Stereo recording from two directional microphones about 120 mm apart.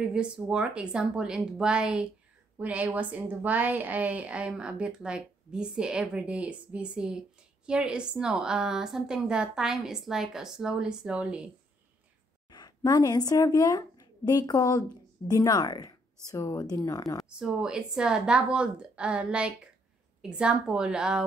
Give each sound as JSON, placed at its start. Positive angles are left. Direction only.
{"t": 0.0, "sound": "a woman's voice", "side_deg": -10}
{"t": 12.4, "sound": "a woman's voice", "side_deg": 35}
{"t": 17.2, "sound": "a woman's voice", "side_deg": -5}